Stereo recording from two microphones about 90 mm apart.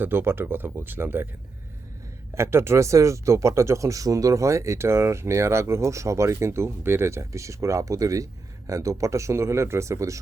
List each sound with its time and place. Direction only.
0.0 s speech: 25° right (ahead or behind)
2.3 s speech: 30° right (ahead or behind)